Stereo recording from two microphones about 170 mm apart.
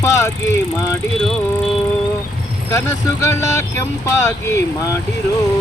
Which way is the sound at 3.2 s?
15° left (ahead or behind).